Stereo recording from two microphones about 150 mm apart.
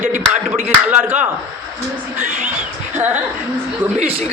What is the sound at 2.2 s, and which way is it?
Speech, 55° right (ahead or behind).